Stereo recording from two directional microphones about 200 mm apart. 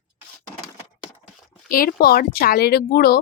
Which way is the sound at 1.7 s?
45° left (ahead or behind).